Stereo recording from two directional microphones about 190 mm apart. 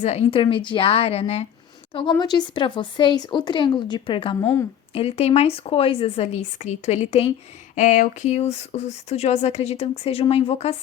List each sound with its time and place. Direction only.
0.0 s speech: 35° left (ahead or behind)